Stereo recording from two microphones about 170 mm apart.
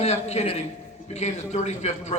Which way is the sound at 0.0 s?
40° left (ahead or behind).